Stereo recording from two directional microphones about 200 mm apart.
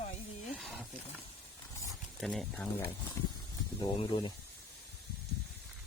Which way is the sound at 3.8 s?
25° left (ahead or behind).